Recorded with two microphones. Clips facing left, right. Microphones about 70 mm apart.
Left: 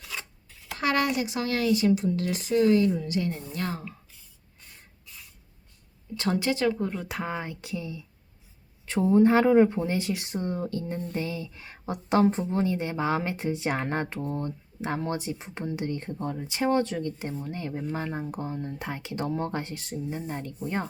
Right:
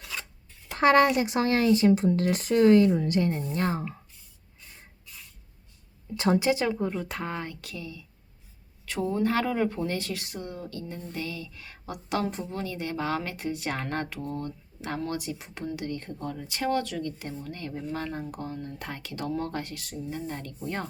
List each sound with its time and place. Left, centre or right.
0.8 s speech: right
5.1 s spray: centre
6.1 s speech: centre
6.7 s speech: centre